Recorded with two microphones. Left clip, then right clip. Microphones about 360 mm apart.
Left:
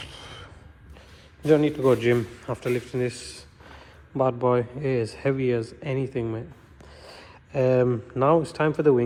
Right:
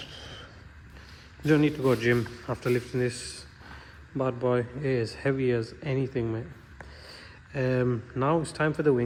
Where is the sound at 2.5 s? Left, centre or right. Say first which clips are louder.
Left 2 dB; left.